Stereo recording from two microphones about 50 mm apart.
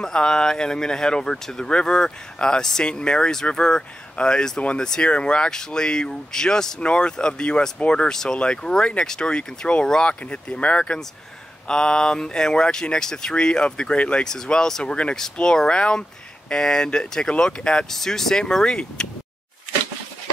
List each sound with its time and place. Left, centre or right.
0.0 s speech: centre